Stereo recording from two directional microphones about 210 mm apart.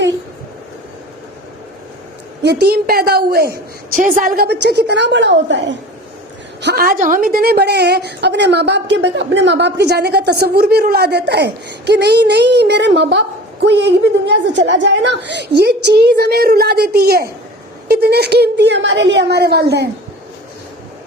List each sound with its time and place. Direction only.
2.4 s a woman's voice: 50° right (ahead or behind)